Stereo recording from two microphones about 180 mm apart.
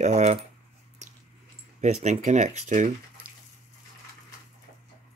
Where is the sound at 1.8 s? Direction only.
40° right (ahead or behind).